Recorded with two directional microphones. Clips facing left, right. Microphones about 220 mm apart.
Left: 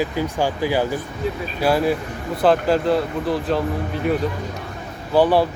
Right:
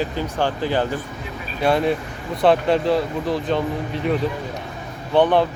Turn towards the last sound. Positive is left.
turn(degrees=5)  # may be behind; listen again after turning